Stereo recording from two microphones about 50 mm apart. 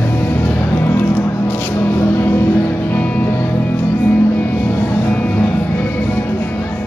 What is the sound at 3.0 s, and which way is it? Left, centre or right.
Music, left.